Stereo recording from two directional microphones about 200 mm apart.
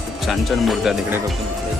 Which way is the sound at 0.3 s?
Centre (ahead or behind).